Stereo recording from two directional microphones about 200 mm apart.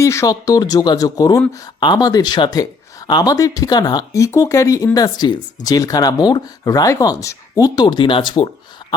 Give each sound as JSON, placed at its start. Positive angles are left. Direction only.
{"t": 0.0, "sound": "speech", "side_deg": 15}